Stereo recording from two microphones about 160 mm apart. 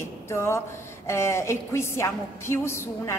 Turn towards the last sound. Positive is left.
turn(degrees=15)  # may be behind; listen again after turning